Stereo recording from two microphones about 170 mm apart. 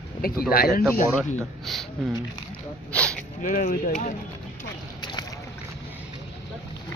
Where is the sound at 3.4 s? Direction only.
55° left (ahead or behind).